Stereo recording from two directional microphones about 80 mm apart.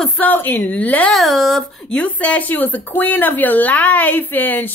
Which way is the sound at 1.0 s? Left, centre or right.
Centre.